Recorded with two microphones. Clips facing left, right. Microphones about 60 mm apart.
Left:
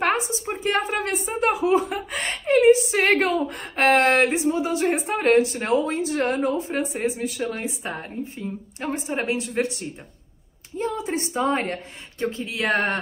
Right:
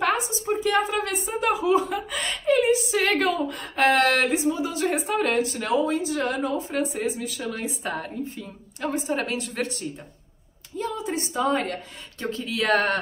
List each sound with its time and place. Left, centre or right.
0.5 s chuckle: left
3.2 s a woman's voice: left
10.8 s speech: left